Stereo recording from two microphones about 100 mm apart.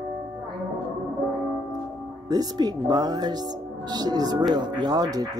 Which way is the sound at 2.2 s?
45° right (ahead or behind).